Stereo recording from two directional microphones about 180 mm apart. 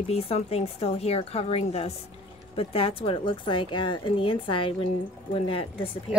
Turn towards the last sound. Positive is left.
turn(degrees=30)  # may be behind; listen again after turning